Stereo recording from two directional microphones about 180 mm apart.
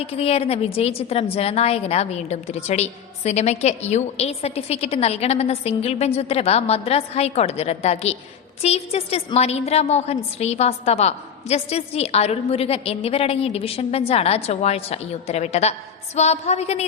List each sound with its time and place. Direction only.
0.0 s a woman's voice: 35° left (ahead or behind)